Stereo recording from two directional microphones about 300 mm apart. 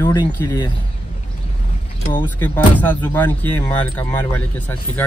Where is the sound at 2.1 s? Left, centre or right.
Centre.